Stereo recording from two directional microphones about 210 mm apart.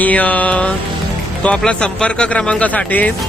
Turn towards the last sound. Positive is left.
turn(degrees=5)  # may be behind; listen again after turning